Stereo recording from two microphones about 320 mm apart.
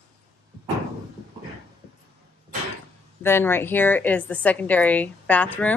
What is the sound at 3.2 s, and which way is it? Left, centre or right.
A woman's voice, centre.